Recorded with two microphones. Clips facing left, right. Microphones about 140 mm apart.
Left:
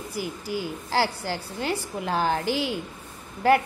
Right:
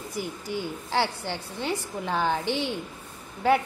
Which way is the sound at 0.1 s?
5° left (ahead or behind).